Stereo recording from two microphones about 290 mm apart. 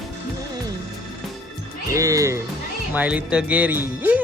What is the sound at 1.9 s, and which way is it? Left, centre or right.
Speech, centre.